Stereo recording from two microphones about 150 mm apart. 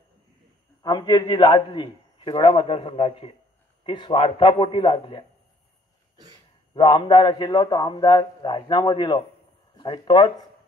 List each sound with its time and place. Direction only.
0.8 s a man's voice: 25° left (ahead or behind)
6.7 s a man's voice: 30° left (ahead or behind)